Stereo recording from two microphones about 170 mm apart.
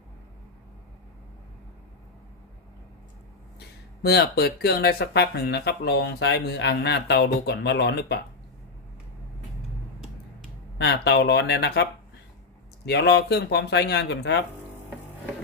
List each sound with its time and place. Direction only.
4.0 s speech: 70° left (ahead or behind)
10.8 s speech: 80° left